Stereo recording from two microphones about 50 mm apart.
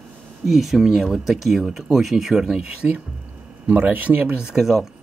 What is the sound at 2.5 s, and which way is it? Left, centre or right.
Speech, right.